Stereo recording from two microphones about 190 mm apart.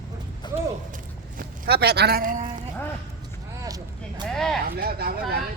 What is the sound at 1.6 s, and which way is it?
Speech, 55° right (ahead or behind).